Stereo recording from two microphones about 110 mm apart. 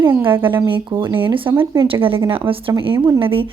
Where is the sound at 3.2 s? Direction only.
55° right (ahead or behind).